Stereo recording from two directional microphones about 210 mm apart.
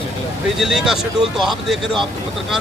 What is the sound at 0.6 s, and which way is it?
Speech, centre (ahead or behind).